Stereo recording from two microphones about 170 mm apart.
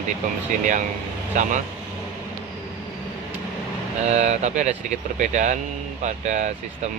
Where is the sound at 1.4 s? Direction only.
50° right (ahead or behind).